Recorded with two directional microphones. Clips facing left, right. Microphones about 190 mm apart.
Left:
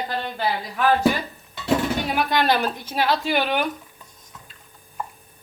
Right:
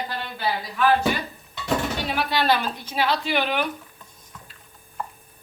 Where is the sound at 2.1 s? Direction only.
50° left (ahead or behind).